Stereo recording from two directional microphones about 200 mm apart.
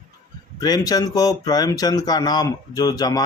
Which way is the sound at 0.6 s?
20° left (ahead or behind).